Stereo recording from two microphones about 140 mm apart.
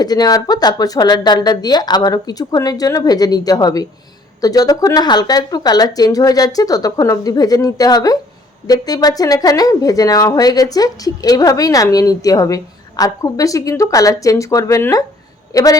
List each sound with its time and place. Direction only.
0.0 s speech: 30° left (ahead or behind)